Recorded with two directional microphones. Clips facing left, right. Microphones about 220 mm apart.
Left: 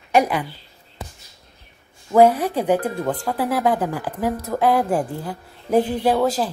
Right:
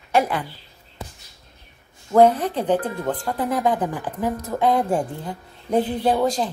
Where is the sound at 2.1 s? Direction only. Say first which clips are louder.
Left 1 dB; 10° left (ahead or behind).